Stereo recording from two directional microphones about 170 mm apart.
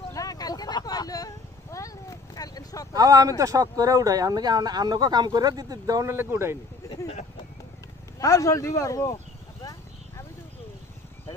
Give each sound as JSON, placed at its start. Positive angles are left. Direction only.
{"t": 0.1, "sound": "vehicle", "side_deg": 20}
{"t": 2.9, "sound": "speech", "side_deg": -20}
{"t": 8.2, "sound": "speech", "side_deg": 20}
{"t": 9.1, "sound": "a sound", "side_deg": 20}